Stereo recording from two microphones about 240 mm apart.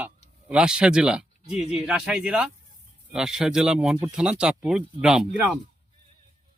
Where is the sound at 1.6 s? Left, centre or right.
Left.